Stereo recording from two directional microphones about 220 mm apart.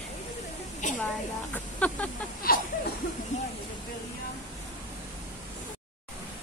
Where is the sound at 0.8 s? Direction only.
35° left (ahead or behind).